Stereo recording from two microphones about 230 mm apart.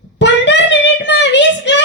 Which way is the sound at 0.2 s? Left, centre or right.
Left.